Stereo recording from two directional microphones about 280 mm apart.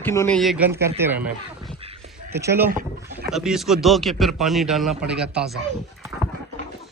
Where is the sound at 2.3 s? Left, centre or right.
Centre.